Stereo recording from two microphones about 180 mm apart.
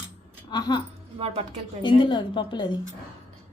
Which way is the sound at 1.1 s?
35° right (ahead or behind).